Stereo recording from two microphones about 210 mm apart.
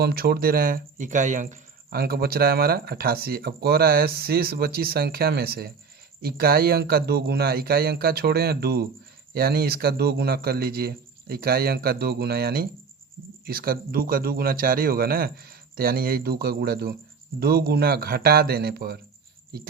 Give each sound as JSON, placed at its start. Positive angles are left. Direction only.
{"t": 0.0, "sound": "speech", "side_deg": -45}